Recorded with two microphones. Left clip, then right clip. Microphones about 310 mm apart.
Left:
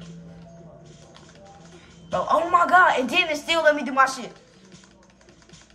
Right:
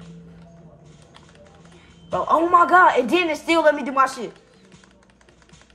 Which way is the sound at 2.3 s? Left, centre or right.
Centre.